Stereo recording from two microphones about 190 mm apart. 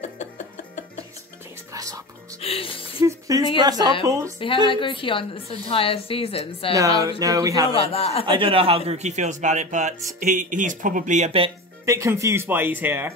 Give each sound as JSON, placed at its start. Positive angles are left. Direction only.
{"t": 1.7, "sound": "music", "side_deg": -15}
{"t": 2.4, "sound": "speech", "side_deg": 30}
{"t": 3.0, "sound": "a sound", "side_deg": -15}
{"t": 3.5, "sound": "speech", "side_deg": -20}
{"t": 4.6, "sound": "a woman's voice", "side_deg": 25}
{"t": 7.0, "sound": "speech", "side_deg": -20}
{"t": 7.7, "sound": "a woman's voice", "side_deg": 30}
{"t": 8.3, "sound": "a man's voice", "side_deg": -30}
{"t": 11.8, "sound": "speech", "side_deg": -15}